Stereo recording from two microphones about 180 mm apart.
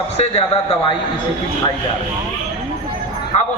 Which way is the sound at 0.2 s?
35° left (ahead or behind).